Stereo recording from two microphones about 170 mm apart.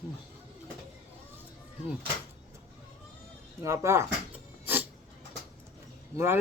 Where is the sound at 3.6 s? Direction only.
15° right (ahead or behind).